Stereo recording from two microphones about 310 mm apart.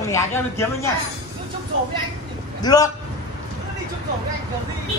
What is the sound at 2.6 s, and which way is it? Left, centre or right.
Speech, centre.